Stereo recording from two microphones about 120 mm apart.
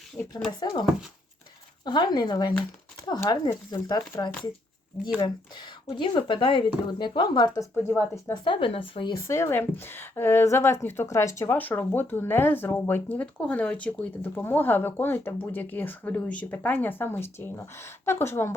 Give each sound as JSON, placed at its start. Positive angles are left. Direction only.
{"t": 0.2, "sound": "speech", "side_deg": 10}
{"t": 0.6, "sound": "speech", "side_deg": 35}
{"t": 7.9, "sound": "speech", "side_deg": 15}
{"t": 8.3, "sound": "speech", "side_deg": 45}
{"t": 9.1, "sound": "speech", "side_deg": 25}